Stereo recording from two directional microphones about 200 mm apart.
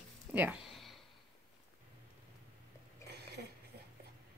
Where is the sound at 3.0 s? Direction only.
55° right (ahead or behind).